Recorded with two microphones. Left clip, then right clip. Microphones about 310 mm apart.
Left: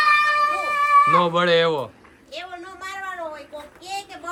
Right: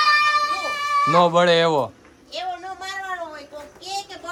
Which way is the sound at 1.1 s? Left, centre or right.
Centre.